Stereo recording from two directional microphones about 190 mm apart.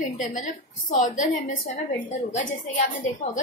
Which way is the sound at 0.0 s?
40° left (ahead or behind).